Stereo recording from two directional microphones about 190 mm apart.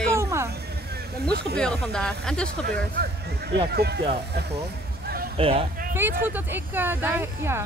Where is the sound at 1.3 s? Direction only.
55° right (ahead or behind).